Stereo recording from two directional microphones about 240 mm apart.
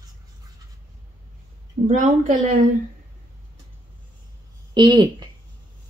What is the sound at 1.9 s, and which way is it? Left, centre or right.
Speech, right.